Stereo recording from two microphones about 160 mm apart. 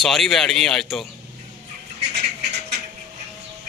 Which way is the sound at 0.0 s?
Centre (ahead or behind).